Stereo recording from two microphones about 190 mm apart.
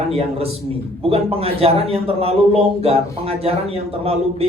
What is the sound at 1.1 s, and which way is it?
A man's voice, 30° right (ahead or behind).